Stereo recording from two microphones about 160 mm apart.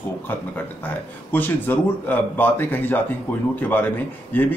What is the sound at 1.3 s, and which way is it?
Speech, 10° left (ahead or behind).